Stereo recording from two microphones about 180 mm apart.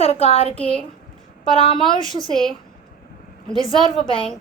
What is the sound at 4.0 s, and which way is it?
Speech, 30° left (ahead or behind).